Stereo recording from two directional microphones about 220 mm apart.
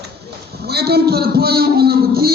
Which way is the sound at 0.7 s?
45° right (ahead or behind).